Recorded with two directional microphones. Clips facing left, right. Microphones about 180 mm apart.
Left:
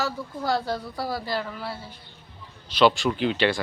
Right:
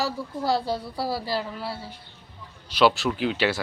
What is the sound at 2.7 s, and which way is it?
Speech, 5° right (ahead or behind).